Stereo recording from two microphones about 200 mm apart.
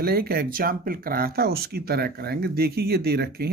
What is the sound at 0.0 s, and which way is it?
Speech, 50° right (ahead or behind).